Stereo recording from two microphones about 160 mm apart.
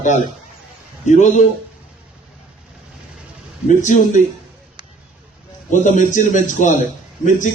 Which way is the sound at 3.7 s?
50° left (ahead or behind).